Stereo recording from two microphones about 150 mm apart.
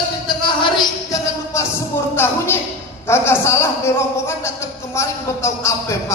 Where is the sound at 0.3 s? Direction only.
30° left (ahead or behind).